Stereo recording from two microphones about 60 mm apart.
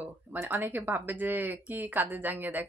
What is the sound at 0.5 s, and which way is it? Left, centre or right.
A woman's voice, right.